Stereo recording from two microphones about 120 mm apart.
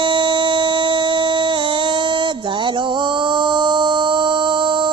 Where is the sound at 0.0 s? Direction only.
40° right (ahead or behind).